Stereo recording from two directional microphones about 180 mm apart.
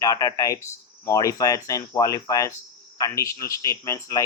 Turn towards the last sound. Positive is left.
turn(degrees=20)  # may be behind; listen again after turning